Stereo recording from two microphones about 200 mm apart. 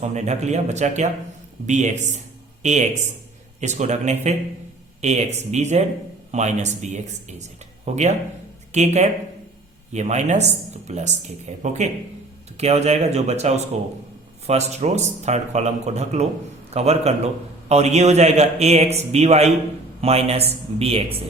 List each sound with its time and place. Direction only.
0.0 s speech: 35° right (ahead or behind)